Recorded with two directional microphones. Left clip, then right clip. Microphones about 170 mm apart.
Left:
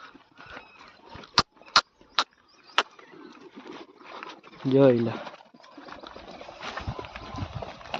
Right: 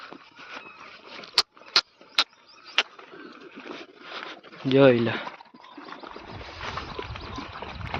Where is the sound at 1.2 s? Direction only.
45° left (ahead or behind).